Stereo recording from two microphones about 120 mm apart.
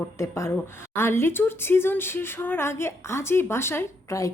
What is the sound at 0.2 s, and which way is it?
A woman's voice, 25° left (ahead or behind).